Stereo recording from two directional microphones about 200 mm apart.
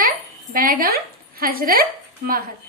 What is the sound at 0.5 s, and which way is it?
A woman's voice, 45° right (ahead or behind).